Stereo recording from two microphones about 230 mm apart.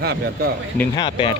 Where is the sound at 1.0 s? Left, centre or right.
Left.